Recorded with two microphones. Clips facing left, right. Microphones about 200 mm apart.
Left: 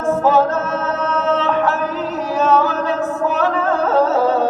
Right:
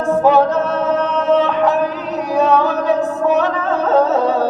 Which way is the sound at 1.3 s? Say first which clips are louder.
Right 4 dB; 15° right (ahead or behind).